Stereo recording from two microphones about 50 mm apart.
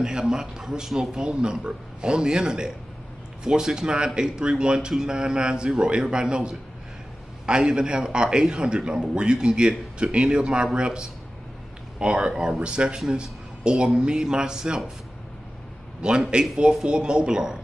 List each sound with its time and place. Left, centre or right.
0.0 s a man's voice: centre
16.0 s a man's voice: centre